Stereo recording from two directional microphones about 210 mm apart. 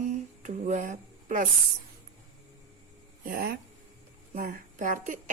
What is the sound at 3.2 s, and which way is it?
Speech, 45° right (ahead or behind).